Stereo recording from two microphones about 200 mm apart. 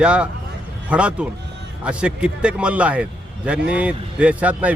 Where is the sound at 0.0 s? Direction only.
5° right (ahead or behind).